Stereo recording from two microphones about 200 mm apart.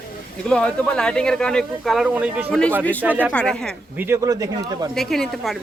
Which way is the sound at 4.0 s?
15° right (ahead or behind).